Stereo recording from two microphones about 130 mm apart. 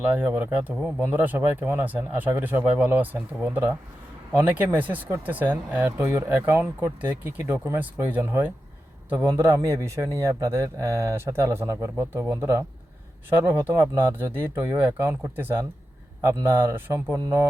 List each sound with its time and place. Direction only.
0.0 s a man's voice: 10° right (ahead or behind)
17.2 s a man's voice: 25° right (ahead or behind)